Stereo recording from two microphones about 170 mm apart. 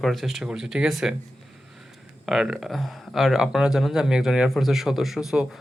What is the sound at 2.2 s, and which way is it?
Speech, 5° right (ahead or behind).